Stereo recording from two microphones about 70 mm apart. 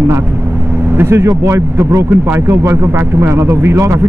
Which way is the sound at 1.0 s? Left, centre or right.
Right.